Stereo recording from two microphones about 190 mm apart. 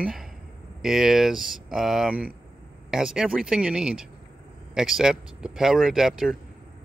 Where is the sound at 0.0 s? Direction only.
Centre (ahead or behind).